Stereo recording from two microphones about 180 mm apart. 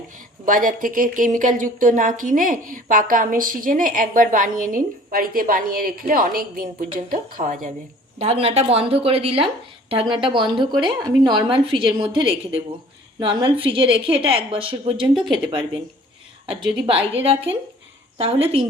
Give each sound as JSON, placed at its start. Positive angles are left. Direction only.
{"t": 0.4, "sound": "a woman's voice", "side_deg": -50}
{"t": 8.2, "sound": "a woman's voice", "side_deg": -35}